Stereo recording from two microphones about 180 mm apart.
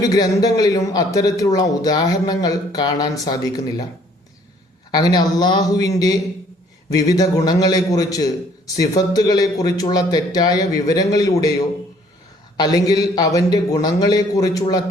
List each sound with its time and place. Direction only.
0.0 s a man's voice: 20° left (ahead or behind)
4.9 s a man's voice: 25° left (ahead or behind)
12.5 s a man's voice: 20° left (ahead or behind)